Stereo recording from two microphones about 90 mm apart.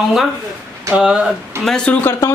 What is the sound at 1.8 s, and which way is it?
Speech, 25° left (ahead or behind).